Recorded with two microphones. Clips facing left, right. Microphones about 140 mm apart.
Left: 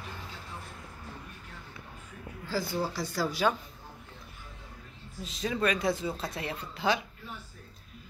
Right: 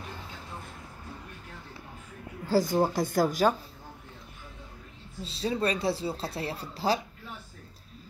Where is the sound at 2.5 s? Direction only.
45° right (ahead or behind).